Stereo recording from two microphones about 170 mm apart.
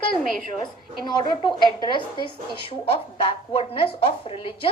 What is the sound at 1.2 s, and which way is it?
A woman's voice, 25° left (ahead or behind).